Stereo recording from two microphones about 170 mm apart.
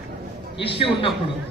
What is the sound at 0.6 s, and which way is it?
Speech, 30° left (ahead or behind).